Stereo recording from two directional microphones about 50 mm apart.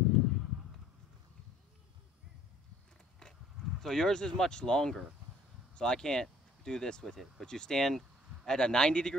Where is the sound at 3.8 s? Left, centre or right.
Centre.